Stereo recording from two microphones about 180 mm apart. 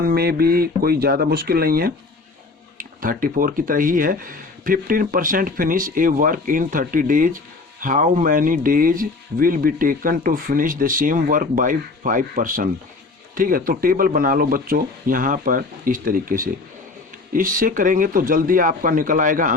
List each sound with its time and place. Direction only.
0.0 s speech: 60° right (ahead or behind)